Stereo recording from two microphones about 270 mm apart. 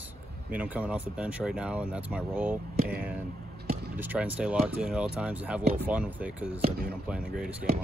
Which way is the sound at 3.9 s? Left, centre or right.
Centre.